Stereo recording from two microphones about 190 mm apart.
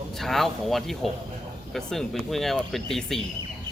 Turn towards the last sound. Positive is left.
turn(degrees=0)  # may be behind; listen again after turning